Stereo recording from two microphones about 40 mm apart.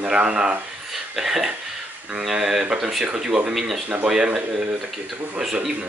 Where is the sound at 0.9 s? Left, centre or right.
Centre.